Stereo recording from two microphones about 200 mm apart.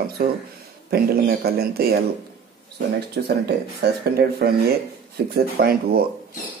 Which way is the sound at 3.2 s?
55° right (ahead or behind).